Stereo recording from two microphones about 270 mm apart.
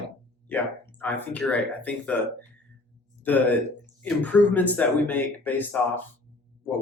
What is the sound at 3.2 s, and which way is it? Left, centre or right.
Speech, centre.